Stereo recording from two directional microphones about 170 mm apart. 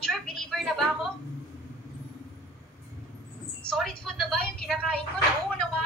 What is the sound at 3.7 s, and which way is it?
A woman's voice, 5° left (ahead or behind).